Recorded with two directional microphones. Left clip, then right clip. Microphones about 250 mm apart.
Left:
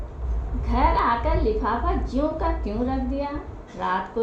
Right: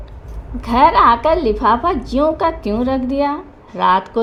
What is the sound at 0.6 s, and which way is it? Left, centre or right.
A woman's voice, right.